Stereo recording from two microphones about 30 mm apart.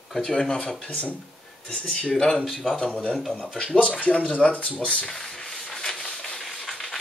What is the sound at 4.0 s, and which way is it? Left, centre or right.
Speech, left.